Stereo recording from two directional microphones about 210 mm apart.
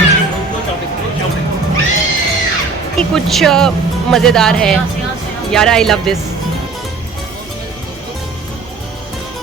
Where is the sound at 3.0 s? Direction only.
Centre (ahead or behind).